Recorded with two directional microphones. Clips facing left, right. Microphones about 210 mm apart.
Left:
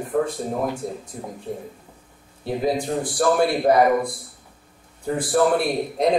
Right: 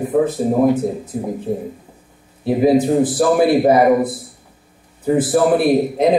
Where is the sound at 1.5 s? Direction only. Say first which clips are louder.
Right 8 dB; 60° right (ahead or behind).